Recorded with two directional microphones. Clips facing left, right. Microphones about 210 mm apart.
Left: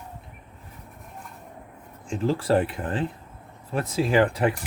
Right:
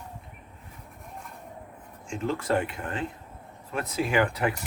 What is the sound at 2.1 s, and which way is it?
Speech, 35° left (ahead or behind).